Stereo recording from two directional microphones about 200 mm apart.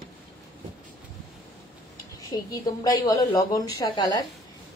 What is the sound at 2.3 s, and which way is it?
A woman's voice, 15° left (ahead or behind).